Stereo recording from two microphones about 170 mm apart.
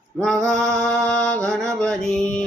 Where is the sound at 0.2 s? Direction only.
5° left (ahead or behind).